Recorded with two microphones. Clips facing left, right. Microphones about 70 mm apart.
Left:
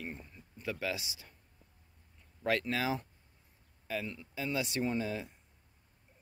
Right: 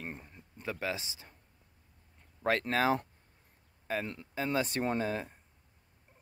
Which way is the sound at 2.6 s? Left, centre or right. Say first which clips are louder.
Right 5 dB; right.